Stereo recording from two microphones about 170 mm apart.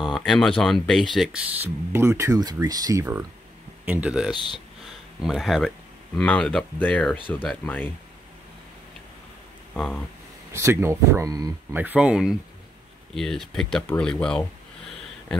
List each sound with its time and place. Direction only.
0.0 s speech: centre (ahead or behind); by 3.3 s 20° right (ahead or behind)
3.8 s speech: 10° right (ahead or behind); by 7.9 s 10° left (ahead or behind)
9.8 s speech: 5° left (ahead or behind)
10.5 s speech: 15° right (ahead or behind)
11.7 s speech: 10° right (ahead or behind)